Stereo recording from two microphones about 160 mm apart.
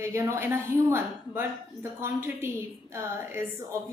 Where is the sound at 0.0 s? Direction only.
20° right (ahead or behind).